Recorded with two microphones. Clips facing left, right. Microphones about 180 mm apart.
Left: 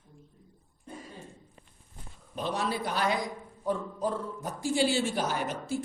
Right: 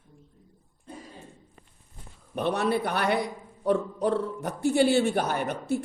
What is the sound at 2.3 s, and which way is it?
A man's voice, 65° right (ahead or behind).